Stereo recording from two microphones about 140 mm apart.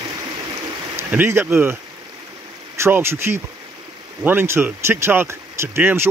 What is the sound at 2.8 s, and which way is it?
Speech, 15° right (ahead or behind).